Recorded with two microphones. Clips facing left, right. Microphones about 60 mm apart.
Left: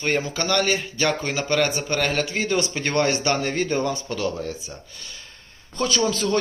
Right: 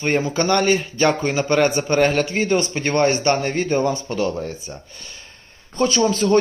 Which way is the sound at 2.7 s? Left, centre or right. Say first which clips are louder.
Right 4 dB; centre.